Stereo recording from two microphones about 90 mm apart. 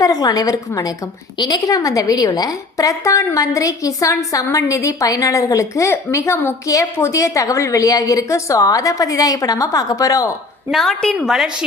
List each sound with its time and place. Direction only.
0.0 s a woman's voice: 45° left (ahead or behind)
10.7 s a woman's voice: centre (ahead or behind)
11.3 s a woman's voice: 5° right (ahead or behind)